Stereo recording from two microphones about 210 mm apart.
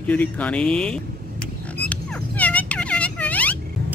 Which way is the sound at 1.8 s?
5° left (ahead or behind).